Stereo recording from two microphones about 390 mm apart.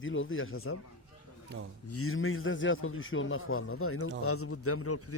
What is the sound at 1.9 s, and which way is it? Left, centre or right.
A man's voice, left.